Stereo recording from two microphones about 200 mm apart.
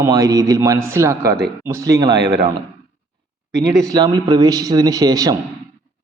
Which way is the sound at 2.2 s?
50° right (ahead or behind).